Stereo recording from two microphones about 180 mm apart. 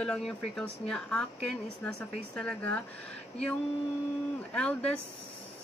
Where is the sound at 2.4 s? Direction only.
5° left (ahead or behind).